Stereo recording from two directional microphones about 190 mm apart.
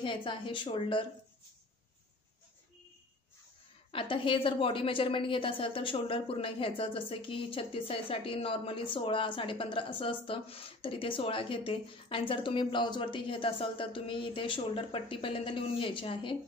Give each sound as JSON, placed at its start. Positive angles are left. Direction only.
{"t": 0.0, "sound": "a woman's voice", "side_deg": 25}
{"t": 3.9, "sound": "a woman's voice", "side_deg": 30}